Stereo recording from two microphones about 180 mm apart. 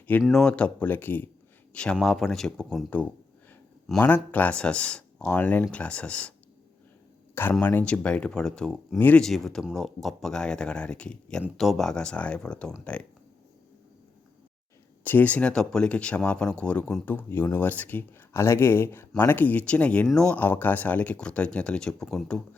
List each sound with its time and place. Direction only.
0.2 s speech: centre (ahead or behind)
7.6 s speech: 10° left (ahead or behind)
15.0 s speech: 10° left (ahead or behind)